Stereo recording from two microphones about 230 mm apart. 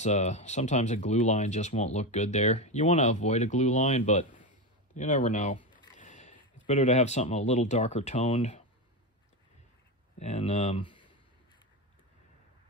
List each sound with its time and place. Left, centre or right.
0.0 s speech: left
10.1 s speech: left